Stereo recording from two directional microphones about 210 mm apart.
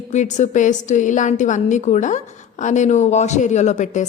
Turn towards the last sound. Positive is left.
turn(degrees=35)  # may be behind; listen again after turning